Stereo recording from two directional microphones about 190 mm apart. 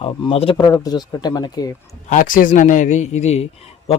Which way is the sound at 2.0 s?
45° left (ahead or behind).